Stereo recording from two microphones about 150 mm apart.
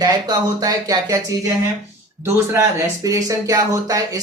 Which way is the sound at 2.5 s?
20° right (ahead or behind).